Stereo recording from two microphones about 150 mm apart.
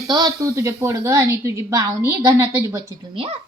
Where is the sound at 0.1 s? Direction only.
25° right (ahead or behind).